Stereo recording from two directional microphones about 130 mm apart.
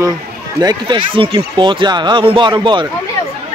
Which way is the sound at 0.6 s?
35° right (ahead or behind).